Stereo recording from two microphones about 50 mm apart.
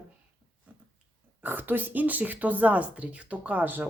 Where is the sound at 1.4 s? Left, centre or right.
Right.